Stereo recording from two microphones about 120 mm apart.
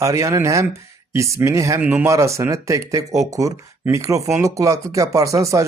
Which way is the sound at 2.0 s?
25° right (ahead or behind).